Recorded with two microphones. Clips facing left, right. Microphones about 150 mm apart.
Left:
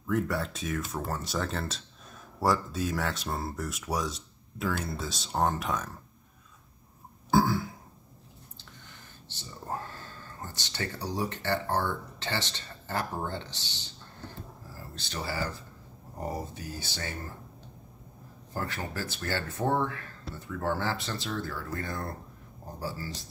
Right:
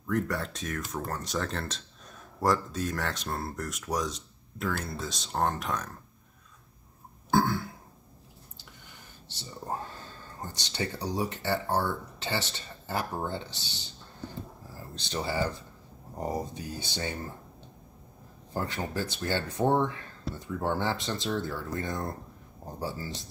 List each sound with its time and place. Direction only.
0.0 s speech: centre (ahead or behind)
7.2 s burping: centre (ahead or behind)
10.4 s speech: 15° right (ahead or behind)
15.0 s speech: 20° right (ahead or behind)
18.5 s speech: 20° right (ahead or behind)